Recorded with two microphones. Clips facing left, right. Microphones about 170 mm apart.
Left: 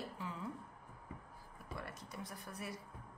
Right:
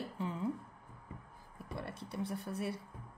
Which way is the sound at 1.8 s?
30° right (ahead or behind).